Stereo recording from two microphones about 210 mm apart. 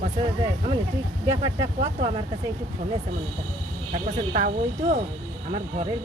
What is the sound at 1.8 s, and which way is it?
Speech, 25° right (ahead or behind).